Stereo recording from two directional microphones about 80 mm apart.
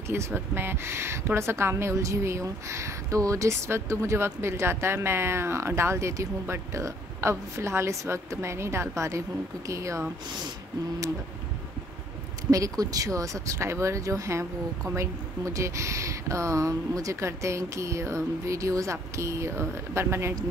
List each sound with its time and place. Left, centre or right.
0.1 s speech: right
12.4 s speech: right